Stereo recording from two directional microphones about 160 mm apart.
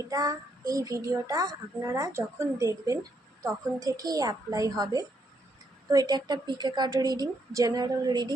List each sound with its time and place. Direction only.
0.0 s a child's voice: 20° right (ahead or behind)